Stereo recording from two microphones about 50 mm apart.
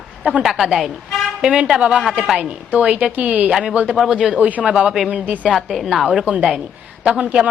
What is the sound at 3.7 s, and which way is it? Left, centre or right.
Speech, right.